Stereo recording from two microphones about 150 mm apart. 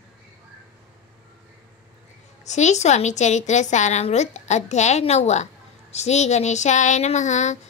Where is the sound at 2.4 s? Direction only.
50° left (ahead or behind).